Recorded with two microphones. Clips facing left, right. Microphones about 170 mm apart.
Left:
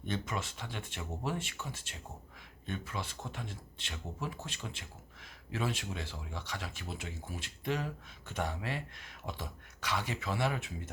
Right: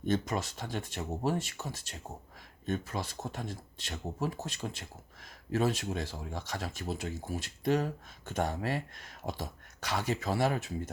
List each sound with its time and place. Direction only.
0.0 s speech: 40° right (ahead or behind)